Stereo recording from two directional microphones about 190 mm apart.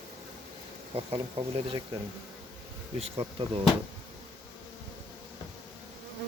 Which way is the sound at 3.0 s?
30° right (ahead or behind).